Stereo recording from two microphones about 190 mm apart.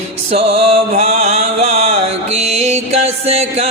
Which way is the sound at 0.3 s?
30° right (ahead or behind).